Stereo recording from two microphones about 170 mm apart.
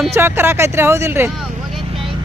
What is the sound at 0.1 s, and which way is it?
Speech, 15° right (ahead or behind).